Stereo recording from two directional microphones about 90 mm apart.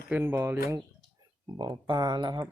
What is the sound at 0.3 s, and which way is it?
Speech, 30° right (ahead or behind).